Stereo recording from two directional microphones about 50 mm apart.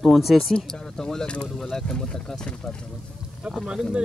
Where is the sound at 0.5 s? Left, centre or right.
Centre.